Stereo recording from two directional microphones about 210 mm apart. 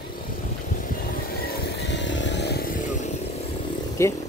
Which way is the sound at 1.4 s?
50° left (ahead or behind).